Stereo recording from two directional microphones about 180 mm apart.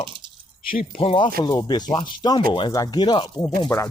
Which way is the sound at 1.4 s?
20° left (ahead or behind).